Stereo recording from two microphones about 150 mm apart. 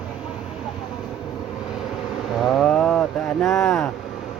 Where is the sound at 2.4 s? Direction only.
Centre (ahead or behind).